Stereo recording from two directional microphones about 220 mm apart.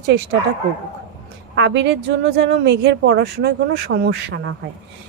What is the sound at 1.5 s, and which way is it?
Speech, 55° right (ahead or behind).